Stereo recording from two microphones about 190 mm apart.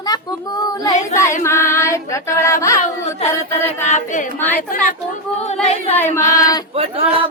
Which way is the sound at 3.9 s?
40° left (ahead or behind).